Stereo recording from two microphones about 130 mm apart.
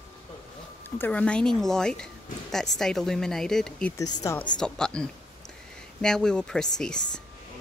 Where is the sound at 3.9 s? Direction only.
25° left (ahead or behind).